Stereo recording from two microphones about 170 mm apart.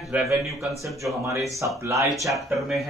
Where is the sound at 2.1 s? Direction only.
Centre (ahead or behind).